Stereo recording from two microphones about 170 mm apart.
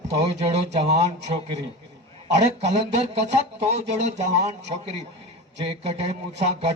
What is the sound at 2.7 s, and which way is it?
A man's voice, 40° right (ahead or behind).